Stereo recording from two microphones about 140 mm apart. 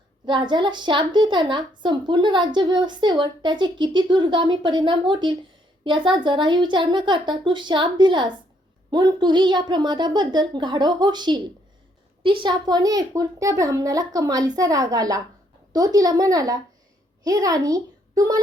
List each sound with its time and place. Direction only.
0.3 s a woman's voice: 35° right (ahead or behind)